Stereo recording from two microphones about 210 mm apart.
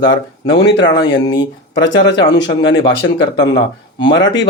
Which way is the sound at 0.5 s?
55° left (ahead or behind).